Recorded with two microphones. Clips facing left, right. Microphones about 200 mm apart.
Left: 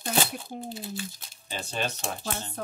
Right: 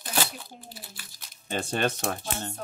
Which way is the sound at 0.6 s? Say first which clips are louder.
Left 12 dB; 25° left (ahead or behind).